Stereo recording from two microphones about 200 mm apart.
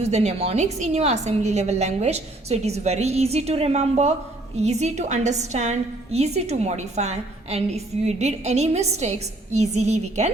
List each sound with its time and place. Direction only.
0.0 s a woman's voice: 30° right (ahead or behind)